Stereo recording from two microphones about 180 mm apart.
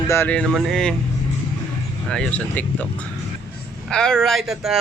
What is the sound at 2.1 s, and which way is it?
Speech, 5° left (ahead or behind).